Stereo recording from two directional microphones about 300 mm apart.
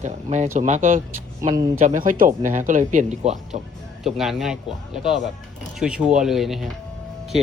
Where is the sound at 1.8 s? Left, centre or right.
Right.